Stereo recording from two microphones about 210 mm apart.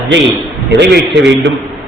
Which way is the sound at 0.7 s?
55° right (ahead or behind).